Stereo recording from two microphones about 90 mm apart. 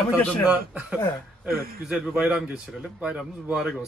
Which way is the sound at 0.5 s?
15° right (ahead or behind).